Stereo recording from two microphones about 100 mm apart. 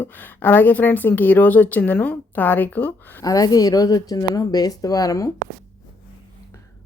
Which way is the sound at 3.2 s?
40° left (ahead or behind).